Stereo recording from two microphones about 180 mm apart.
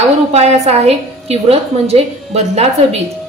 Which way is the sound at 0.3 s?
35° right (ahead or behind).